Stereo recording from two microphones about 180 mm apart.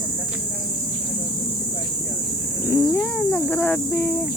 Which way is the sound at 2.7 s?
15° left (ahead or behind).